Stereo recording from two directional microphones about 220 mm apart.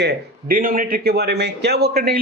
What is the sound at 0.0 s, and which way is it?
A man's voice, 45° right (ahead or behind).